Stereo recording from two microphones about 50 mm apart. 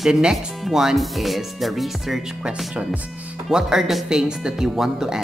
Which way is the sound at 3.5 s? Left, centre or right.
Centre.